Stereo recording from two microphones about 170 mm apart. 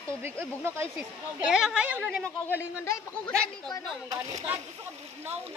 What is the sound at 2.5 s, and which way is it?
Speech, 15° left (ahead or behind).